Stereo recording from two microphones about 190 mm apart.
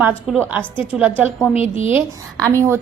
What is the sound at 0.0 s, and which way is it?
A woman's voice, 5° right (ahead or behind).